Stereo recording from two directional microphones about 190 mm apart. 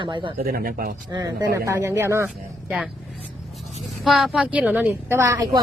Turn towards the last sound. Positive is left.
turn(degrees=-15)  # may be behind; listen again after turning